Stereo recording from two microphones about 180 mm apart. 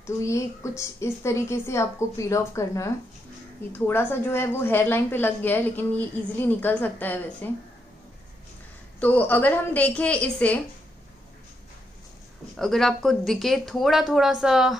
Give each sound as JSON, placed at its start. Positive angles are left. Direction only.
{"t": 0.0, "sound": "a woman's voice", "side_deg": 15}
{"t": 9.0, "sound": "a woman's voice", "side_deg": 10}
{"t": 12.5, "sound": "speech", "side_deg": 0}